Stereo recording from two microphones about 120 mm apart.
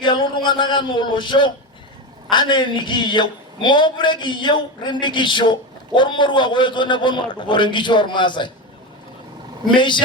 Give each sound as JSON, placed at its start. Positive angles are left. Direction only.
{"t": 0.0, "sound": "a man's voice", "side_deg": 40}
{"t": 9.7, "sound": "a man's voice", "side_deg": 40}